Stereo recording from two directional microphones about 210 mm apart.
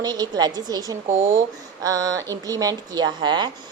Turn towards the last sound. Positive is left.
turn(degrees=-20)  # may be behind; listen again after turning